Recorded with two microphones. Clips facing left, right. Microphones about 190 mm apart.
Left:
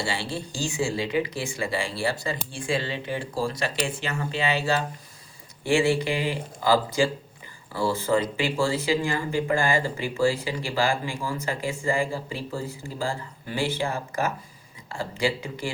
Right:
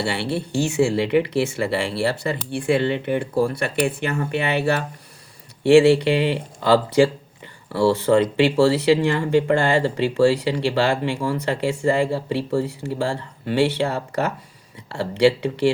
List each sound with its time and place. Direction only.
0.0 s speech: 65° right (ahead or behind)